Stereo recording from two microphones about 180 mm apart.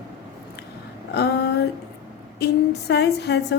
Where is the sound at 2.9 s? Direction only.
65° left (ahead or behind).